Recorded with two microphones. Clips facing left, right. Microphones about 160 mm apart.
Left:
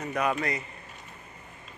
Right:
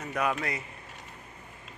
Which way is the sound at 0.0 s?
Centre (ahead or behind).